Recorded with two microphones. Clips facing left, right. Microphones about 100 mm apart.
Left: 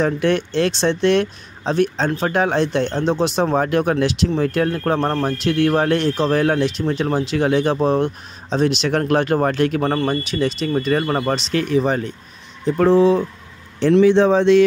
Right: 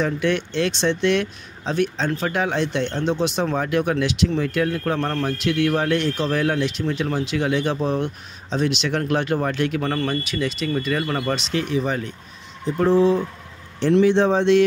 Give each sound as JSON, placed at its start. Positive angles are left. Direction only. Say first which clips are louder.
{"t": 0.0, "sound": "speech", "louder": "left 4 dB", "side_deg": 40}
{"t": 12.7, "sound": "speech", "louder": "left 3 dB", "side_deg": 90}